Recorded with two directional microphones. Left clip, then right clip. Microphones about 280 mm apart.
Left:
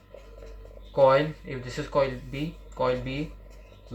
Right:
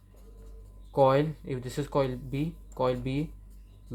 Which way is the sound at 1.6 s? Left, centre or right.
Right.